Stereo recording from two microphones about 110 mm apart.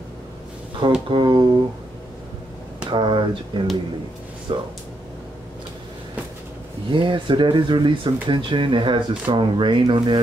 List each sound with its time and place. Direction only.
0.8 s speech: 45° right (ahead or behind)
2.9 s speech: 45° right (ahead or behind)
6.9 s speech: 50° right (ahead or behind)